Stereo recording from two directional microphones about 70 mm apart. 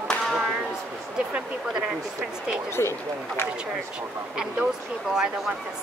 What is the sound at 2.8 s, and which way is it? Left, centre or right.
Speech, left.